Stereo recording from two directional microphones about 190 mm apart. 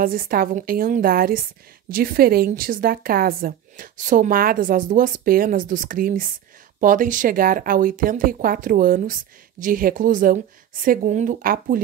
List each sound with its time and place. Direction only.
0.0 s a woman's voice: 50° right (ahead or behind)